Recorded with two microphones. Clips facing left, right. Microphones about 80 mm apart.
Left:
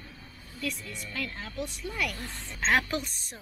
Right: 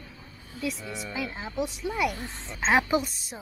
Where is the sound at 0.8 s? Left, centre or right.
Centre.